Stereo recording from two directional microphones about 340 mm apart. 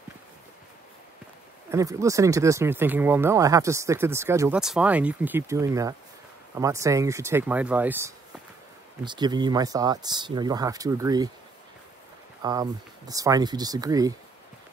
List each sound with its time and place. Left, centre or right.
1.7 s speech: centre
12.4 s speech: centre